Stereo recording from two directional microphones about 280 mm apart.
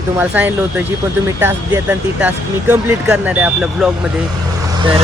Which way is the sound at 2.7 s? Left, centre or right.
Centre.